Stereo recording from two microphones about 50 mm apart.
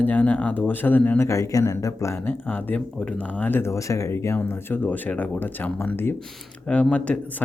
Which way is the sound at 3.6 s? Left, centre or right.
Left.